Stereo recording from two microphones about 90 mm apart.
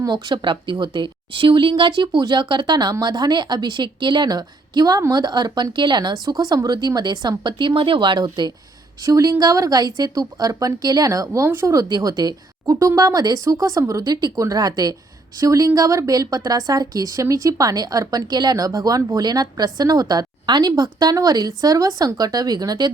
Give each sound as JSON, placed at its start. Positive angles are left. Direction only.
{"t": 0.0, "sound": "a woman's voice", "side_deg": -55}
{"t": 9.0, "sound": "a woman's voice", "side_deg": -40}